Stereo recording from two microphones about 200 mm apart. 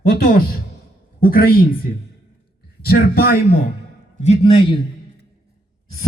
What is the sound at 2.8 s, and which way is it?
Speech, 50° left (ahead or behind).